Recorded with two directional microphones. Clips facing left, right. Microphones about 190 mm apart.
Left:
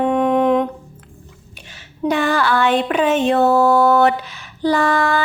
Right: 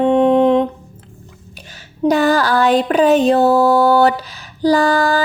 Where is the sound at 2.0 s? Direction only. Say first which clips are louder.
Right 4 dB; 40° right (ahead or behind).